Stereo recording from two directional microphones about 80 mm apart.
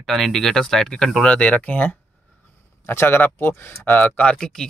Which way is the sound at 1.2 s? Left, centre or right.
Centre.